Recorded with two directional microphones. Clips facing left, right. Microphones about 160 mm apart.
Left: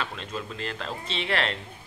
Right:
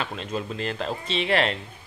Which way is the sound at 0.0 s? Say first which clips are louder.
Right 4 dB; 20° right (ahead or behind).